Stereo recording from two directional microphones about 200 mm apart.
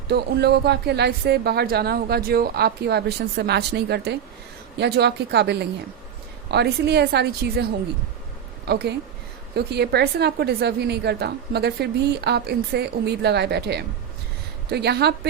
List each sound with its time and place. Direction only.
0.1 s a woman's voice: 55° right (ahead or behind)